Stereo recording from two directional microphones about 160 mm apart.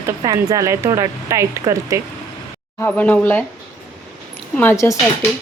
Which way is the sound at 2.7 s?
10° left (ahead or behind).